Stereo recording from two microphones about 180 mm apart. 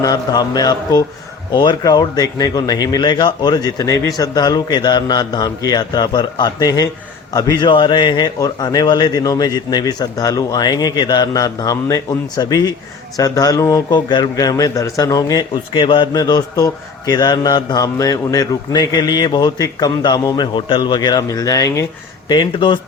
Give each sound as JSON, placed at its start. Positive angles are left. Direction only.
{"t": 0.0, "sound": "a man's voice", "side_deg": 20}